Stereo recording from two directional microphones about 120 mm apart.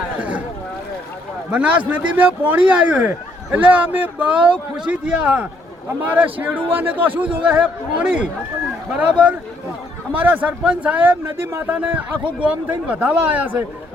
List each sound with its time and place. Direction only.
0.2 s boat: 15° right (ahead or behind)
1.5 s speech: 10° right (ahead or behind)